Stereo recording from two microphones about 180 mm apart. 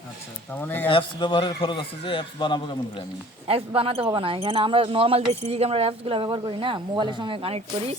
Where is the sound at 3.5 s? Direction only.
30° right (ahead or behind).